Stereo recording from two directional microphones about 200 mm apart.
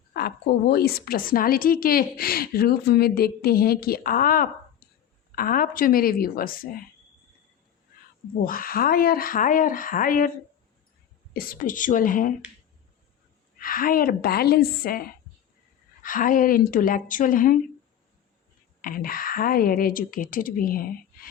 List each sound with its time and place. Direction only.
0.1 s a woman's voice: 50° left (ahead or behind)
8.4 s a woman's voice: 45° left (ahead or behind)
11.3 s a woman's voice: 45° left (ahead or behind)
13.6 s a woman's voice: 45° left (ahead or behind)
16.0 s a woman's voice: 45° left (ahead or behind)
18.8 s a woman's voice: 45° left (ahead or behind)